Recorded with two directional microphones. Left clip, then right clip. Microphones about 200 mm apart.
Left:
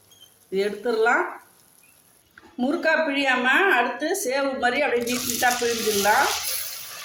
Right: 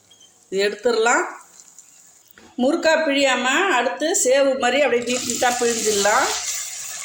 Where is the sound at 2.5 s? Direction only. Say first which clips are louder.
Right 4 dB; 35° right (ahead or behind).